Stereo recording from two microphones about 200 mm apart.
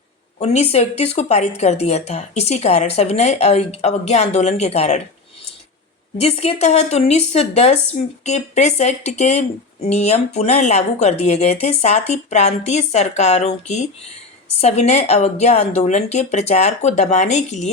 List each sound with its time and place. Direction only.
0.3 s speech: 30° left (ahead or behind)
6.1 s speech: 30° left (ahead or behind)